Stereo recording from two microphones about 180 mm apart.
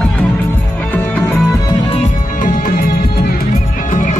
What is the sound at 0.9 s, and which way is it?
Music, 10° left (ahead or behind).